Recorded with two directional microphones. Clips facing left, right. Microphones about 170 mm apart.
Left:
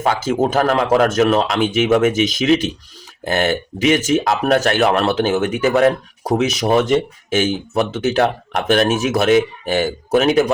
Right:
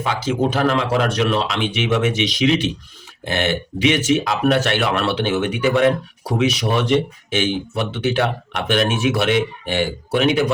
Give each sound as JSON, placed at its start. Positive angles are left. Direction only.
{"t": 0.0, "sound": "speech", "side_deg": 45}